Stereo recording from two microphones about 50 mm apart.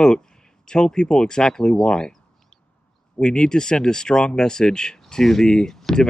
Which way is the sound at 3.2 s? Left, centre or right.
Centre.